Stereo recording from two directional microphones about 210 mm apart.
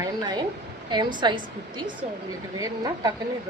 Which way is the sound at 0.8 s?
20° right (ahead or behind).